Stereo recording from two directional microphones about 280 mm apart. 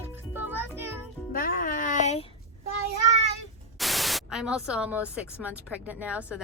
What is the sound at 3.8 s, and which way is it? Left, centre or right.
Speech, centre.